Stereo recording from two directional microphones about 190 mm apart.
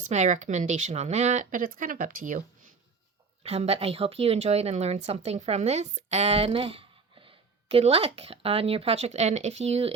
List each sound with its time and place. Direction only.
0.0 s speech: 40° right (ahead or behind)
3.4 s speech: 35° right (ahead or behind)